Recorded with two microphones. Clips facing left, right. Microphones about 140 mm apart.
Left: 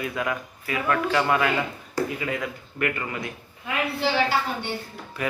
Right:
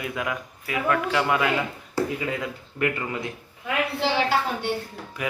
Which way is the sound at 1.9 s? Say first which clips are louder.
Right 1 dB; 25° right (ahead or behind).